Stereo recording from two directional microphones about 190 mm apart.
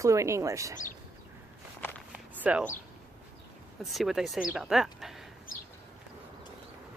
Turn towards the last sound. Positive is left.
turn(degrees=0)  # may be behind; listen again after turning